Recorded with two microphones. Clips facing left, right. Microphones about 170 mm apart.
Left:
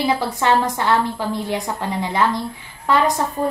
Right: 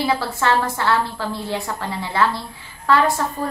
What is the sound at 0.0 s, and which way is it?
A woman's voice, 15° left (ahead or behind).